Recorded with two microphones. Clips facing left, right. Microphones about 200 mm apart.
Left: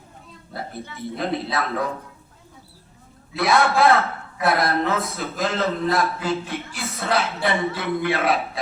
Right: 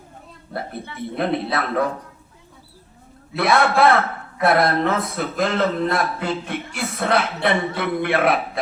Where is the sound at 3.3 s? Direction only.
55° right (ahead or behind).